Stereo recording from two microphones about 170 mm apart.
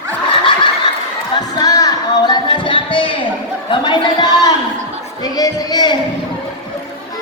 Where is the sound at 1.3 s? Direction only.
20° left (ahead or behind).